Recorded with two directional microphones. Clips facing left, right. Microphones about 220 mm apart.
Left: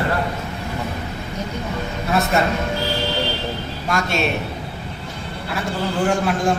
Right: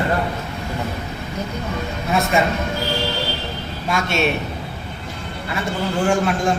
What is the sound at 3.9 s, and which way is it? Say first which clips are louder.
Speech: right 1 dB; centre (ahead or behind).